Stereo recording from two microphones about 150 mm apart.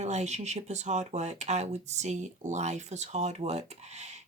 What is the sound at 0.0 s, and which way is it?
Speech, 50° right (ahead or behind).